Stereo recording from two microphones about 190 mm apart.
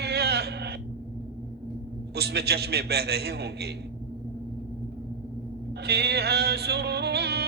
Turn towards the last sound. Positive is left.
turn(degrees=-60)  # may be behind; listen again after turning